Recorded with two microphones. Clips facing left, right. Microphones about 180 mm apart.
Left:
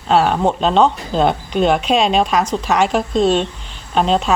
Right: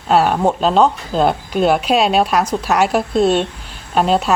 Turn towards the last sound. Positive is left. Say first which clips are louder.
# right 1 dB
turn(degrees=-5)  # may be behind; listen again after turning